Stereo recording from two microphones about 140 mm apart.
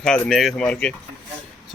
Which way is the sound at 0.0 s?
5° left (ahead or behind).